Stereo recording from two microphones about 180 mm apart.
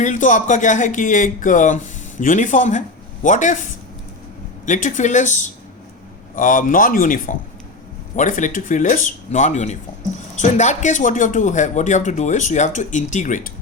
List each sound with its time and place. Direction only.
0.0 s a man's voice: 45° left (ahead or behind)